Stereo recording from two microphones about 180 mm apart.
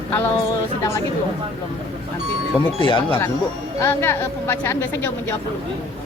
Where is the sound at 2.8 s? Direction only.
25° left (ahead or behind).